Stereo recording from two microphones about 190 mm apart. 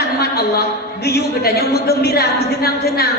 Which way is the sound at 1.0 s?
55° left (ahead or behind).